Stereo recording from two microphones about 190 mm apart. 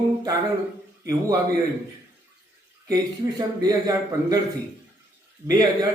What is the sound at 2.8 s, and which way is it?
A man's voice, 20° right (ahead or behind).